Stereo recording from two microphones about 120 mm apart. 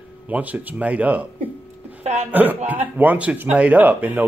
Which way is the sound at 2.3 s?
15° right (ahead or behind).